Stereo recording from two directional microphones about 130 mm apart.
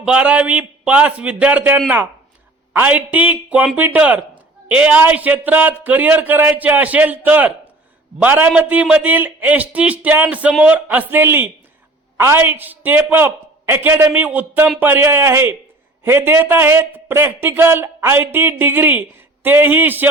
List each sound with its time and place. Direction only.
0.0 s speech: 10° right (ahead or behind)